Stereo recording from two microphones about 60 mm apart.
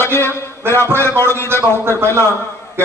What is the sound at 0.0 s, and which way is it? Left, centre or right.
A man's voice, left.